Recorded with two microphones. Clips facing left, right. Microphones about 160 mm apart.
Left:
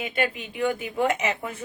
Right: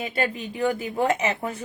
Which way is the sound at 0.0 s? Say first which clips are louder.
Right 1 dB; 35° right (ahead or behind).